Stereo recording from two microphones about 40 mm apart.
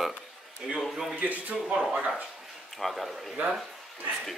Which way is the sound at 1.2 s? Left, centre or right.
Right.